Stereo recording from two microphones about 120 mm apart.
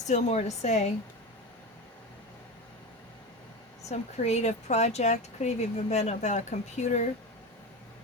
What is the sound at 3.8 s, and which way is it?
Speech, 70° left (ahead or behind).